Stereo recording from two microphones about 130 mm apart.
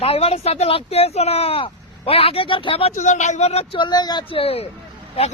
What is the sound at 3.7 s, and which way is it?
Speech, 35° left (ahead or behind).